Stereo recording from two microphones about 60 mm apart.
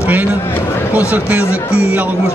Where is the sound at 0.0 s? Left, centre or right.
Right.